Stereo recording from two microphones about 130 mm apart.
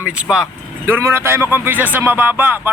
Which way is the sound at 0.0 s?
5° right (ahead or behind).